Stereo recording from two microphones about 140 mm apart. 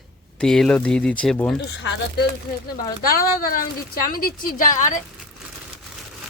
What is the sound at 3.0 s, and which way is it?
A woman's voice, 90° left.